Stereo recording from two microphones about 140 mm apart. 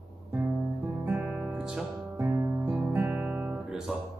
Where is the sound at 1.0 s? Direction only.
15° right (ahead or behind).